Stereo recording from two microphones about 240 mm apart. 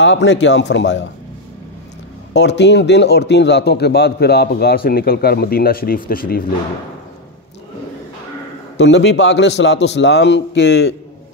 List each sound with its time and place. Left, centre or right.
0.0 s a man's voice: left
2.3 s a man's voice: left
8.7 s a man's voice: left